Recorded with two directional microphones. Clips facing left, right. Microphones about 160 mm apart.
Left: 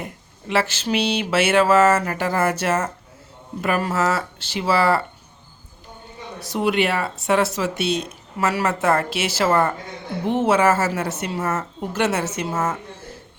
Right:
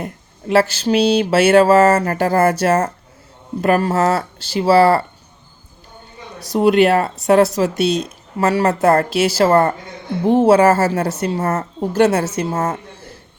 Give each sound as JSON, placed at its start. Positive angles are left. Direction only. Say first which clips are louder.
{"t": 0.0, "sound": "speech", "louder": "right 6 dB", "side_deg": -40}
{"t": 6.4, "sound": "speech", "louder": "right 8 dB", "side_deg": -40}